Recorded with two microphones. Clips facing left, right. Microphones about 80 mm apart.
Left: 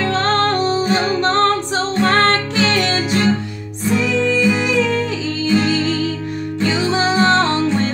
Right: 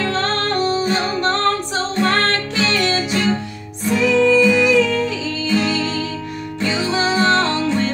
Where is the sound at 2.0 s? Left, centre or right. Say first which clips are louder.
Left 5 dB; left.